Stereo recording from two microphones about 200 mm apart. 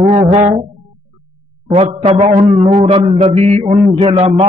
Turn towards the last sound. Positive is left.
turn(degrees=-30)  # may be behind; listen again after turning